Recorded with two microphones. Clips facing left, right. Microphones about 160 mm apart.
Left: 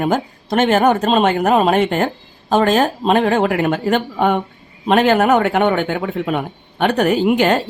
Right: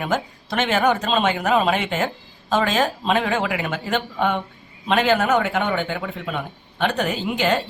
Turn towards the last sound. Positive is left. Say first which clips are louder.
# left 7 dB
turn(degrees=55)  # may be behind; listen again after turning